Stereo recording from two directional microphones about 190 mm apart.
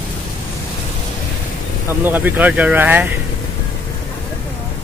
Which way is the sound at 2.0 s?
10° right (ahead or behind).